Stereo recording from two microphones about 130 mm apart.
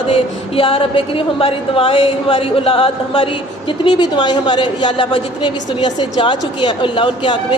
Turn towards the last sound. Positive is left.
turn(degrees=40)  # may be behind; listen again after turning